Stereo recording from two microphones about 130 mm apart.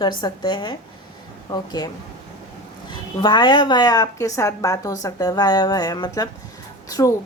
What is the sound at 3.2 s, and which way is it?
A woman's voice, 35° left (ahead or behind).